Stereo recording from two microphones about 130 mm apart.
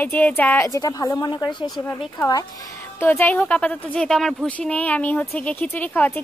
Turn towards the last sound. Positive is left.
turn(degrees=10)  # may be behind; listen again after turning